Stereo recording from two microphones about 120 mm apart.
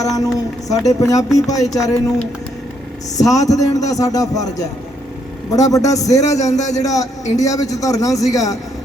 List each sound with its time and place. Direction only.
0.2 s a man's voice: 30° left (ahead or behind)
3.2 s a man's voice: 30° left (ahead or behind)
6.6 s a man's voice: 75° left (ahead or behind)
6.8 s a man's voice: 30° left (ahead or behind)